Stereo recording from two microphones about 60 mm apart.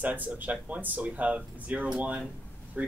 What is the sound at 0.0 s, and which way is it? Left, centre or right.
Speech, right.